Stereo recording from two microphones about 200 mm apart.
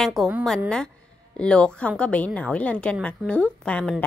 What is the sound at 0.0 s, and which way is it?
A woman's voice, centre (ahead or behind).